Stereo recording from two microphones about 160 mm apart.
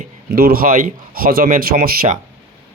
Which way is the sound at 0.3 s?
70° right (ahead or behind).